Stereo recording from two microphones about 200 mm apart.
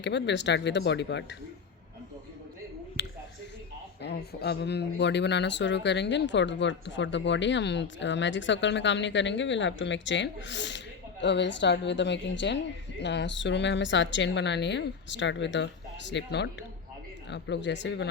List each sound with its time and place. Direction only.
0.0 s speech: 60° left (ahead or behind)
4.0 s speech: 55° left (ahead or behind)